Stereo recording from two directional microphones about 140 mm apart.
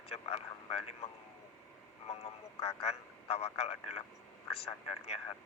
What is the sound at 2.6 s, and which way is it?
A man's voice, 45° left (ahead or behind).